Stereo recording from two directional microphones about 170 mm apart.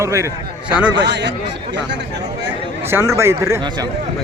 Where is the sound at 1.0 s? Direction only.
90° right.